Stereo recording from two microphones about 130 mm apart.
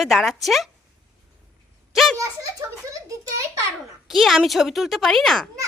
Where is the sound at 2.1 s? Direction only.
25° right (ahead or behind).